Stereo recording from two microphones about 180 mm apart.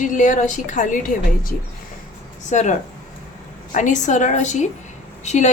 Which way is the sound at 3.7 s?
45° left (ahead or behind).